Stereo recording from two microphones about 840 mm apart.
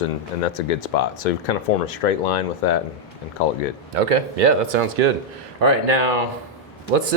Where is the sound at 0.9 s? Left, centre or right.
Left.